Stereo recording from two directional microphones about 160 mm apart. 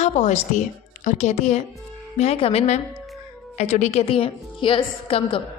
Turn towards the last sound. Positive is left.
turn(degrees=35)  # may be behind; listen again after turning